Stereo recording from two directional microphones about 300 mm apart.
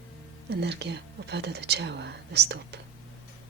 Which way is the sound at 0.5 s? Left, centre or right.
Right.